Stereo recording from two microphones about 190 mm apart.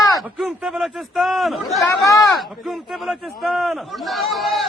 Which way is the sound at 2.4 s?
Centre (ahead or behind).